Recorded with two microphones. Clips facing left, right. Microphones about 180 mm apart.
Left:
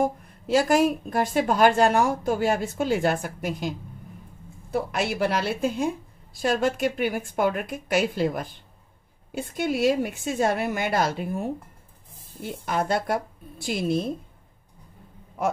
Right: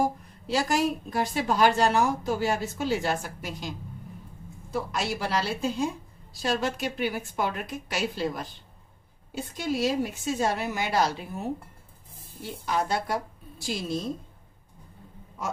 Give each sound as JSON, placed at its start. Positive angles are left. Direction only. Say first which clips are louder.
{"t": 0.5, "sound": "a woman's voice", "louder": "left 5 dB", "side_deg": 50}